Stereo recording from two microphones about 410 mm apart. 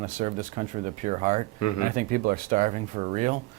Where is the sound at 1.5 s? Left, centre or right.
Left.